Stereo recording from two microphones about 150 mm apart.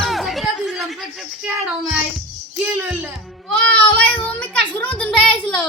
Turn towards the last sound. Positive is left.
turn(degrees=5)  # may be behind; listen again after turning